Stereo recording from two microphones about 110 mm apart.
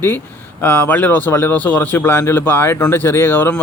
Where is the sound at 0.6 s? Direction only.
15° left (ahead or behind).